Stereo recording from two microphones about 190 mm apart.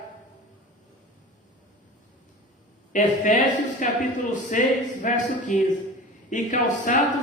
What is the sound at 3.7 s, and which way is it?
A man's voice, 40° left (ahead or behind).